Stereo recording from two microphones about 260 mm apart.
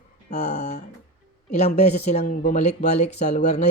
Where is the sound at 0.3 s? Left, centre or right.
Left.